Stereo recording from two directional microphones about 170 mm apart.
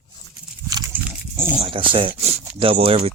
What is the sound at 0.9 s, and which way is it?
Dog, 10° right (ahead or behind).